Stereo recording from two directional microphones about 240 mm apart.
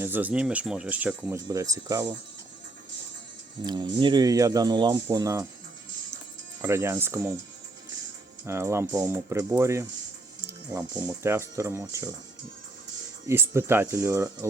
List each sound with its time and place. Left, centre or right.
0.0 s speech: centre
3.6 s speech: centre
6.6 s speech: centre
8.4 s speech: centre
13.2 s speech: centre